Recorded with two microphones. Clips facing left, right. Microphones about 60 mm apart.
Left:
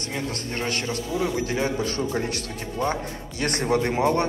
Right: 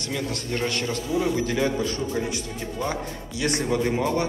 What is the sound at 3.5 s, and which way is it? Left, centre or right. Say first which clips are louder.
Speech: left 1 dB; left.